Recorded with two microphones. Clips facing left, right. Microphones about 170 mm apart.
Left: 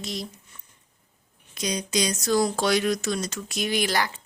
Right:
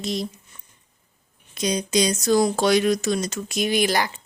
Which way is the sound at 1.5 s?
25° right (ahead or behind).